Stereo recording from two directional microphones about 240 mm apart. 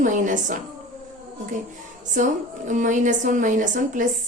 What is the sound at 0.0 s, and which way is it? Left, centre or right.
Speech, right.